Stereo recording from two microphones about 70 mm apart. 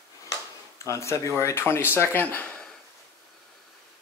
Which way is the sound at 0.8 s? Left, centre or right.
Left.